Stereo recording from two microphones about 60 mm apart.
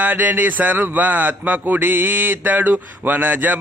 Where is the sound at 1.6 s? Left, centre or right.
Right.